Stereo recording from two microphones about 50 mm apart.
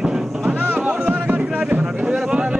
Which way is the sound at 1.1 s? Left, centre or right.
Right.